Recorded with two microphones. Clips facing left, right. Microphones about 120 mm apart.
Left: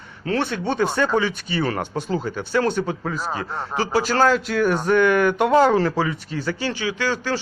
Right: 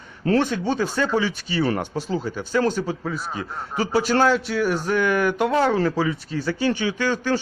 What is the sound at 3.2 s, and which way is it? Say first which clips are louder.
Speech: left 3 dB; 90° left.